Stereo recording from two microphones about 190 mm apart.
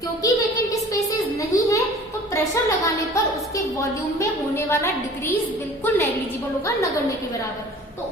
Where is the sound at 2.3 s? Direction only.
15° left (ahead or behind).